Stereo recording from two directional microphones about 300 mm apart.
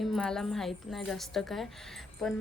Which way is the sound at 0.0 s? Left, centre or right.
Centre.